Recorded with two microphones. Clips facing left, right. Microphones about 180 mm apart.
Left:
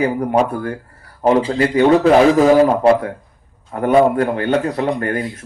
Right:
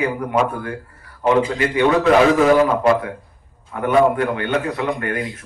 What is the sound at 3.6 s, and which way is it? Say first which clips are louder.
Speech: left 3 dB; 40° left (ahead or behind).